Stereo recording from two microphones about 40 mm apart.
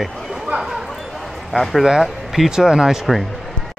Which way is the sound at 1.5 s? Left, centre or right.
Centre.